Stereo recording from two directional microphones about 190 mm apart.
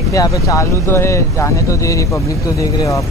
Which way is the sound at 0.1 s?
20° left (ahead or behind).